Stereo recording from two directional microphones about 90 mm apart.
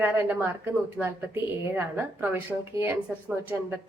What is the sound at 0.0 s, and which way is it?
A woman's voice, 20° right (ahead or behind).